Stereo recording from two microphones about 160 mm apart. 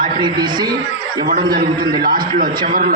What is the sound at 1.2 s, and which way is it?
A man's voice, 65° right (ahead or behind).